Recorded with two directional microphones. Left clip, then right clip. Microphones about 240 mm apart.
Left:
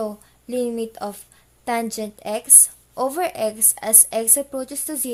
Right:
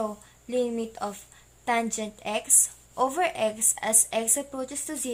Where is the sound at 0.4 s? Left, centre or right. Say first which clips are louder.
Left 3 dB; left.